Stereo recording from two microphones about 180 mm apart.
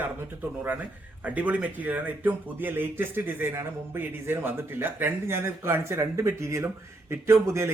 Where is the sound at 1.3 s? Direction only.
10° right (ahead or behind).